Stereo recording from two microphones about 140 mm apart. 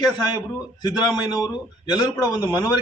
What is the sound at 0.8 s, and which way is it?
Speech, 30° left (ahead or behind).